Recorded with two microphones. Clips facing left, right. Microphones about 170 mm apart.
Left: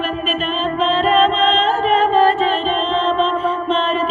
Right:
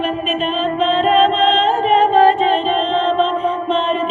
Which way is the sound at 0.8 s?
55° right (ahead or behind).